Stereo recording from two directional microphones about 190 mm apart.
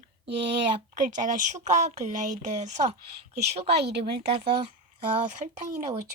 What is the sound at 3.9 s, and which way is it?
Speech, 60° right (ahead or behind).